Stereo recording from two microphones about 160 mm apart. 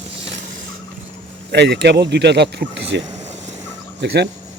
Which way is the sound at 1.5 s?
90° right.